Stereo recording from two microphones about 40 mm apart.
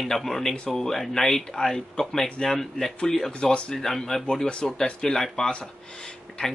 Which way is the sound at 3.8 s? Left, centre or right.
Centre.